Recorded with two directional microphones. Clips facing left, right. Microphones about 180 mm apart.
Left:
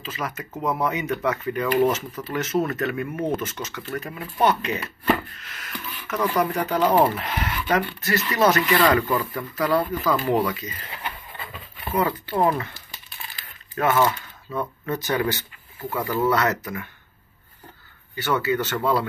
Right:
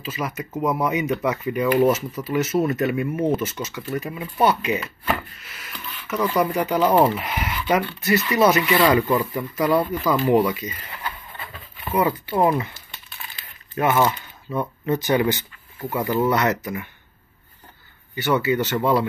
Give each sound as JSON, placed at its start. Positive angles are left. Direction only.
{"t": 0.0, "sound": "speech", "side_deg": -10}
{"t": 11.9, "sound": "speech", "side_deg": -15}
{"t": 13.7, "sound": "speech", "side_deg": -15}
{"t": 18.1, "sound": "speech", "side_deg": -15}